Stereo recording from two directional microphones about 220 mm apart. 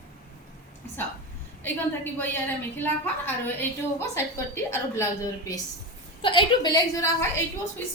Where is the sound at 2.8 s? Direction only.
10° left (ahead or behind).